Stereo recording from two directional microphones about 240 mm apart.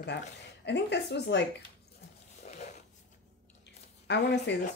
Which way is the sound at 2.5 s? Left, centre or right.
Left.